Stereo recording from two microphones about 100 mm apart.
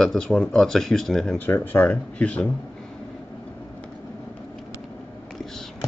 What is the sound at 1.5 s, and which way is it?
Speech, 20° left (ahead or behind).